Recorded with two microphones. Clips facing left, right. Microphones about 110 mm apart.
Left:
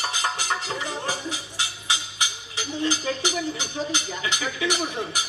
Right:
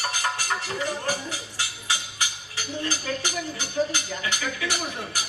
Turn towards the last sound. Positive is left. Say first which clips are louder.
# left 3 dB
turn(degrees=20)  # may be behind; listen again after turning